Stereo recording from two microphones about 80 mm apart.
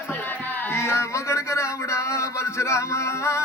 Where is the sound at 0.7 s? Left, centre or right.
Left.